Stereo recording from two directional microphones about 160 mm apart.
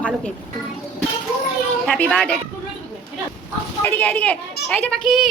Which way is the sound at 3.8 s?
10° left (ahead or behind).